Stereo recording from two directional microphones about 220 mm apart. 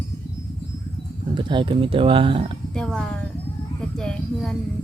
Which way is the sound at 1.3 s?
20° right (ahead or behind).